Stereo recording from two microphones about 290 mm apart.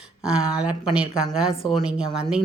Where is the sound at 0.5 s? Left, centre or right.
Centre.